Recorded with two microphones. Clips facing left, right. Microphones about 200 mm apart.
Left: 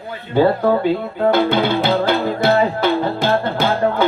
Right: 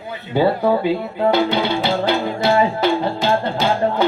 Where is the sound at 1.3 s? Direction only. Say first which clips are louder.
Left 2 dB; 50° left (ahead or behind).